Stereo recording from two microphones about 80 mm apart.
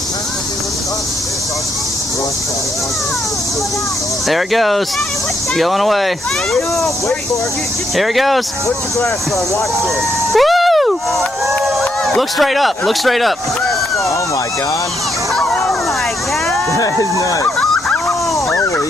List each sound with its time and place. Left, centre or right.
4.3 s speech: centre
7.9 s speech: centre
10.3 s a sound: centre
11.6 s a man's voice: centre
15.3 s a sound: centre
16.7 s speech: left
18.0 s dog: left